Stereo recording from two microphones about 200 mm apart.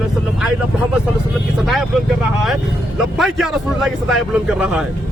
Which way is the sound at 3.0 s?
Centre (ahead or behind).